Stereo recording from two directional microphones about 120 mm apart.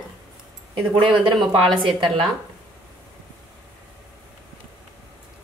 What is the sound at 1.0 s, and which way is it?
Speech, 40° right (ahead or behind).